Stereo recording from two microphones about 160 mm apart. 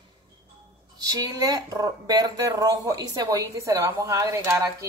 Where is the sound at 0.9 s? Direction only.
25° right (ahead or behind).